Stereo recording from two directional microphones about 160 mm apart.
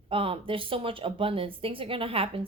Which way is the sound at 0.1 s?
35° right (ahead or behind).